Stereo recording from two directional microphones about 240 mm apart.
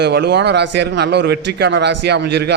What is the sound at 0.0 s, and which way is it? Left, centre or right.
A man's voice, right.